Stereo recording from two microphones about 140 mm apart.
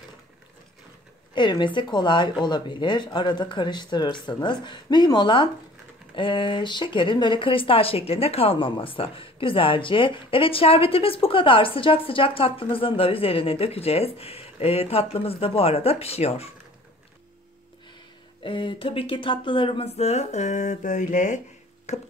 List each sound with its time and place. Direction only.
1.3 s speech: 35° left (ahead or behind)
18.4 s speech: 35° left (ahead or behind); by 22.0 s 50° left (ahead or behind)